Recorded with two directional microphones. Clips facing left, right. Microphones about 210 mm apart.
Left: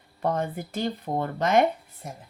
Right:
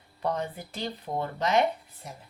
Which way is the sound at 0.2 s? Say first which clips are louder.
Left 3 dB; 50° left (ahead or behind).